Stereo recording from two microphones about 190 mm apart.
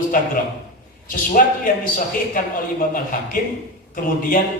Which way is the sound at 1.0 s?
45° left (ahead or behind).